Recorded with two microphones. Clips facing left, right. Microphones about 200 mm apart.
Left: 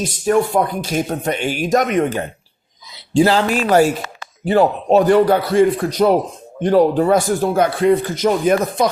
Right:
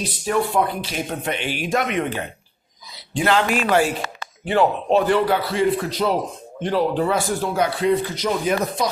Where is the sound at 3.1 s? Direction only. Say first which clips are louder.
Left 5 dB; 35° left (ahead or behind); by 8.9 s 50° left (ahead or behind).